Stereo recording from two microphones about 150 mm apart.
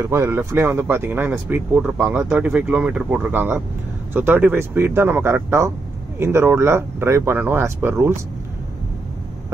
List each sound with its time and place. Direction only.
0.0 s speech: 20° right (ahead or behind)